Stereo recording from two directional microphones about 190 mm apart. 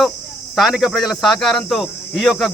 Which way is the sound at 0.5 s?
Centre (ahead or behind).